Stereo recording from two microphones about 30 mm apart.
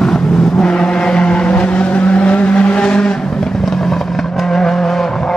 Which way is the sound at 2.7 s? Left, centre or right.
Left.